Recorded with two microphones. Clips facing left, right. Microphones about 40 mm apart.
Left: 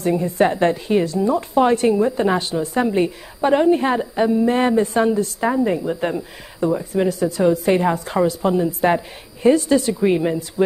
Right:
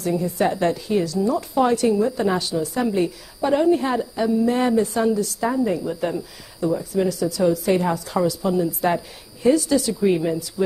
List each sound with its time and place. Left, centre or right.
0.0 s a woman's voice: left